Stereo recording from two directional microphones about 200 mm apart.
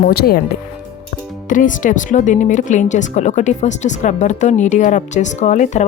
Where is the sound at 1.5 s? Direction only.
40° left (ahead or behind).